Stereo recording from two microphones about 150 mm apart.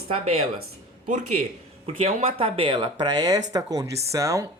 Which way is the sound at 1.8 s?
40° right (ahead or behind).